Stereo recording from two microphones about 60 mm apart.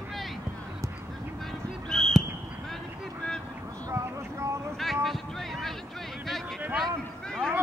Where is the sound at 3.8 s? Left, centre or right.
Right.